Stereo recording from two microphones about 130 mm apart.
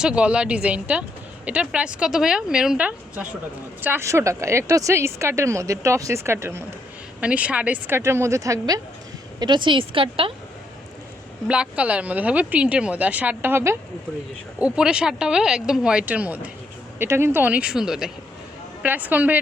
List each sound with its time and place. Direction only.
0.0 s speech: 10° right (ahead or behind); by 8.8 s 25° right (ahead or behind)
9.4 s a woman's voice: 35° right (ahead or behind)
11.4 s speech: 10° right (ahead or behind)
14.6 s speech: 5° right (ahead or behind)